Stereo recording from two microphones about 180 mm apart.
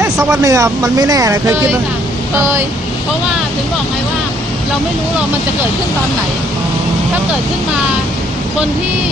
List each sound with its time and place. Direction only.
0.0 s speech: 15° right (ahead or behind)